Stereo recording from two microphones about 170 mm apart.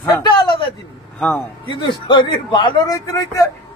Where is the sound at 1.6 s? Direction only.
30° left (ahead or behind).